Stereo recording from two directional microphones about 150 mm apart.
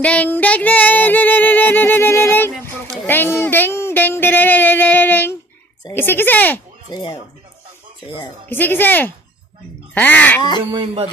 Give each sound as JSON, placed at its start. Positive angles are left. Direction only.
{"t": 0.0, "sound": "female singing", "side_deg": 10}
{"t": 3.4, "sound": "music", "side_deg": 15}
{"t": 5.9, "sound": "female singing", "side_deg": 15}
{"t": 6.9, "sound": "speech", "side_deg": 30}
{"t": 8.5, "sound": "female singing", "side_deg": 15}